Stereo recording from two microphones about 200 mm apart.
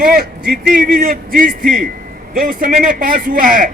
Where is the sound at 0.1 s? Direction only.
50° right (ahead or behind).